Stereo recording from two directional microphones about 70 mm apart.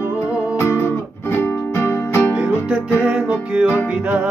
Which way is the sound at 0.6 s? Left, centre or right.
Left.